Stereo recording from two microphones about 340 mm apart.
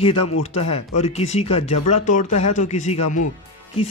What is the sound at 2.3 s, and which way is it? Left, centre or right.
Speech, left.